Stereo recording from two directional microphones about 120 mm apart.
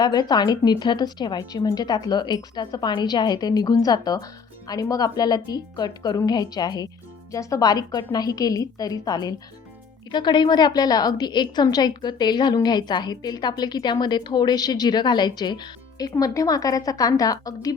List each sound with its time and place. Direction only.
0.0 s a woman's voice: 35° left (ahead or behind)